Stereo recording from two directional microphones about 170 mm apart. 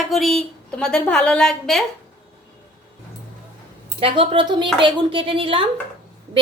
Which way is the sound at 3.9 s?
30° right (ahead or behind).